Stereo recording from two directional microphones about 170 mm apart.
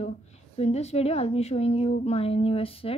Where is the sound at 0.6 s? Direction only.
40° left (ahead or behind).